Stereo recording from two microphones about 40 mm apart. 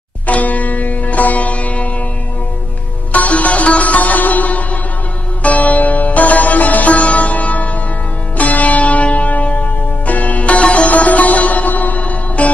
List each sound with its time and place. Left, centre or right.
0.3 s sitar: left
3.1 s sitar: left
8.4 s church bell: left